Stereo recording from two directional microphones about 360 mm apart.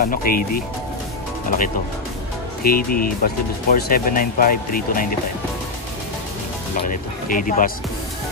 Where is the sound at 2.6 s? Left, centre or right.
Left.